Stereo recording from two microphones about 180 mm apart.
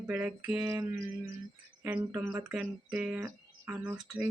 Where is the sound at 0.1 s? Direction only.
5° right (ahead or behind).